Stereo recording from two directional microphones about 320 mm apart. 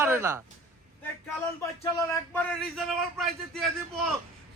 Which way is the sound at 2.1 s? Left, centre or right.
Centre.